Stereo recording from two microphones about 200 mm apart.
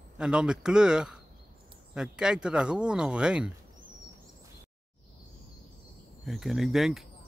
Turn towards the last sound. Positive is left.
turn(degrees=0)  # may be behind; listen again after turning